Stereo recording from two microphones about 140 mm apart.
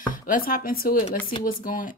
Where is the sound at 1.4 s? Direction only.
80° left.